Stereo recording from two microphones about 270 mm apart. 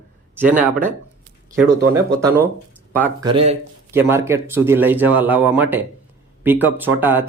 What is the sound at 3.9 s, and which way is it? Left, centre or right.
Speech, centre.